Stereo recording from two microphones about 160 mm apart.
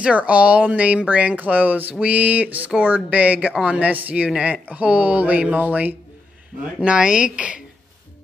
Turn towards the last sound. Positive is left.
turn(degrees=-5)  # may be behind; listen again after turning